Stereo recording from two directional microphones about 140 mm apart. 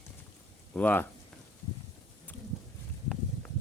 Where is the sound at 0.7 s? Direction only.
10° left (ahead or behind).